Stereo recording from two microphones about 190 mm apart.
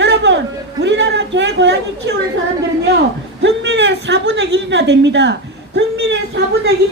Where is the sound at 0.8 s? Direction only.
65° right (ahead or behind).